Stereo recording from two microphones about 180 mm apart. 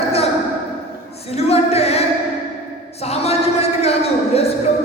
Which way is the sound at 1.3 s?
35° left (ahead or behind).